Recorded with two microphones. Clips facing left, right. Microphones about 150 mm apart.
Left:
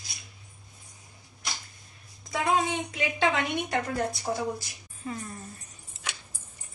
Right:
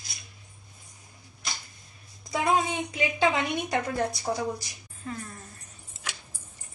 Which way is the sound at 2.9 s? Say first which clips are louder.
Right 4 dB; centre (ahead or behind).